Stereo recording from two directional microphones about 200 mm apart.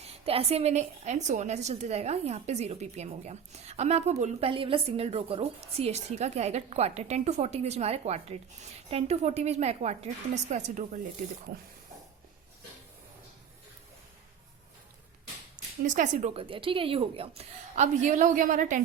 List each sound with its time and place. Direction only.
0.1 s a woman's voice: 30° right (ahead or behind)
15.9 s a woman's voice: 40° right (ahead or behind)
16.3 s a woman's voice: 25° right (ahead or behind)